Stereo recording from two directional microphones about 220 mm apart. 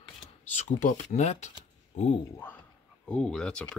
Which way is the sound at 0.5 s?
35° left (ahead or behind).